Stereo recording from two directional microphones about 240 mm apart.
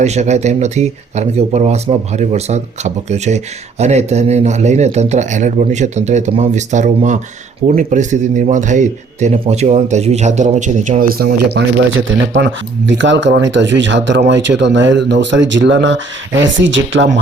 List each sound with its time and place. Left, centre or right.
0.0 s speech: right